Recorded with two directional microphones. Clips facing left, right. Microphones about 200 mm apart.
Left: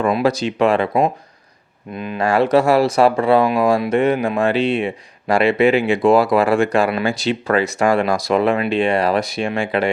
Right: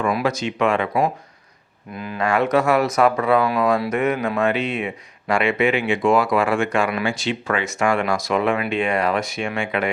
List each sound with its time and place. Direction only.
0.0 s speech: 35° left (ahead or behind)
2.0 s speech: 20° left (ahead or behind)
2.2 s speech: 30° left (ahead or behind)